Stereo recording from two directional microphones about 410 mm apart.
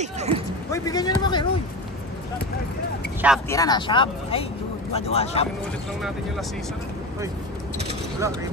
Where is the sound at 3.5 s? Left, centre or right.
Centre.